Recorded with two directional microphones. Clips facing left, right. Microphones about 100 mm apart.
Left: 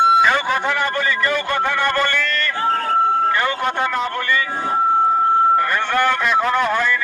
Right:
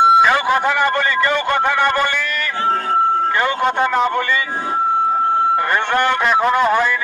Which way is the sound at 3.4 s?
15° right (ahead or behind).